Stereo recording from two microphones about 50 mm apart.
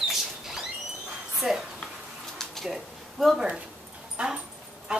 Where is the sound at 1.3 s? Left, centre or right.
Centre.